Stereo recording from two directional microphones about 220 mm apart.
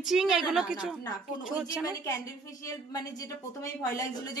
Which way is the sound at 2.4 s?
15° left (ahead or behind).